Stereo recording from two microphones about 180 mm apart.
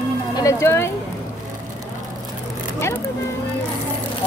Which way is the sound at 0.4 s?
15° left (ahead or behind).